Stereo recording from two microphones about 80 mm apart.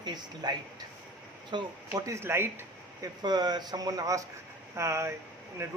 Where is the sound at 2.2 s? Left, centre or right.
Right.